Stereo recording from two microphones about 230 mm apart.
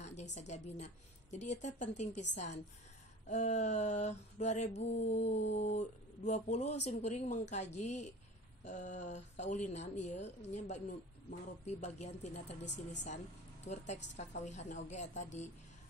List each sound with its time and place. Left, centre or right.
0.0 s a woman's voice: left